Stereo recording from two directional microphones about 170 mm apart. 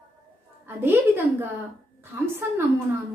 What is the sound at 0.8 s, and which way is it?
A woman's voice, 10° right (ahead or behind).